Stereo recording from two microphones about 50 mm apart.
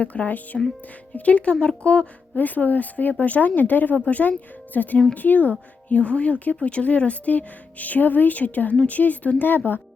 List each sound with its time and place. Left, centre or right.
0.0 s speech: left
2.4 s speech: left